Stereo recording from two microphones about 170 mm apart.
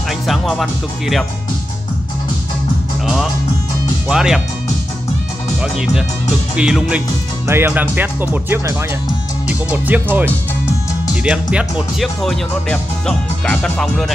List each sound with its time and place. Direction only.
0.3 s speech: centre (ahead or behind)
4.1 s speech: 5° right (ahead or behind)
5.6 s speech: 5° right (ahead or behind)